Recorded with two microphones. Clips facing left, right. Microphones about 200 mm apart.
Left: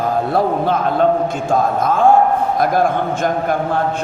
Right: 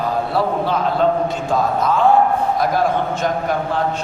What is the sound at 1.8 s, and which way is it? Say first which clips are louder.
A man's voice: left 2 dB; 50° left (ahead or behind).